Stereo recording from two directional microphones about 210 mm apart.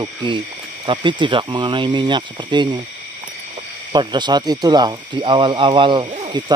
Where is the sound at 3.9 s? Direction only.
20° right (ahead or behind).